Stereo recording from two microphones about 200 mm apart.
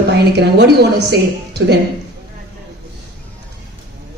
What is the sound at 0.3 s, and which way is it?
A man's voice, 55° right (ahead or behind).